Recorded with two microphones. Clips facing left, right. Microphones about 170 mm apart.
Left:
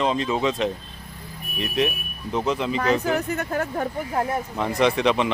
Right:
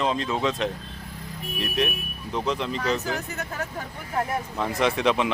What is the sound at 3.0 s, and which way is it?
Speech, 55° left (ahead or behind).